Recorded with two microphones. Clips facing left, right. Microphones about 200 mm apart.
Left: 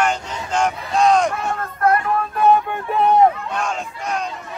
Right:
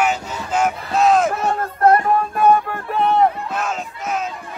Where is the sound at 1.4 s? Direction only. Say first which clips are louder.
Right 4 dB; 35° right (ahead or behind).